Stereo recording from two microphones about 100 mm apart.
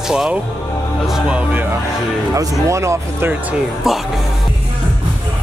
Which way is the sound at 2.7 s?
30° right (ahead or behind).